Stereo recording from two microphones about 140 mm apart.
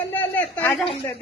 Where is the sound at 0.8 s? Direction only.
40° left (ahead or behind).